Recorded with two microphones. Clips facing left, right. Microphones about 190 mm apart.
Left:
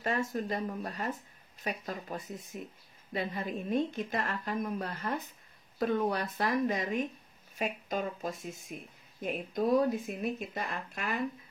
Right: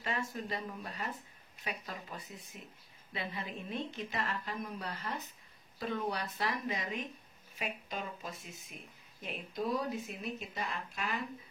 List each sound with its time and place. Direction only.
0.0 s speech: 45° left (ahead or behind)